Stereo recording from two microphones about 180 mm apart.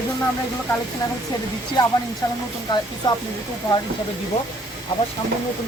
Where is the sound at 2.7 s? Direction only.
20° left (ahead or behind).